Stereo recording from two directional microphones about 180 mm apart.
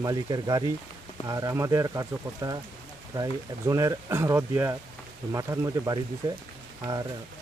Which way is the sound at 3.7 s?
20° right (ahead or behind).